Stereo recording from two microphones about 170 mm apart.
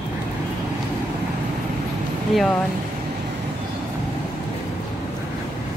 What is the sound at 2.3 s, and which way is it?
Speech, centre (ahead or behind).